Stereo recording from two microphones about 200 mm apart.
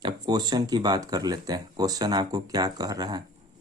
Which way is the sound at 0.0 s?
20° right (ahead or behind).